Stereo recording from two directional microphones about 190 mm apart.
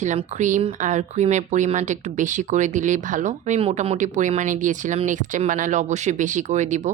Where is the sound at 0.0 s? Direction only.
40° right (ahead or behind).